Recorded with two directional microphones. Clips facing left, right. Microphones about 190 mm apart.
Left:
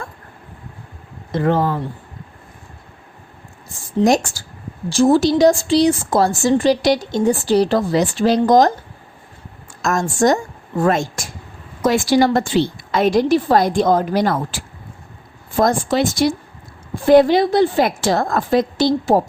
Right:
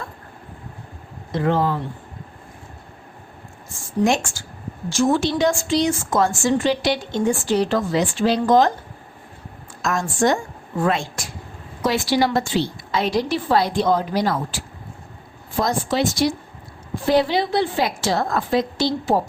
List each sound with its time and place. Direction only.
1.4 s a woman's voice: 50° left (ahead or behind)
4.0 s speech: 40° left (ahead or behind)
9.8 s a woman's voice: 45° left (ahead or behind)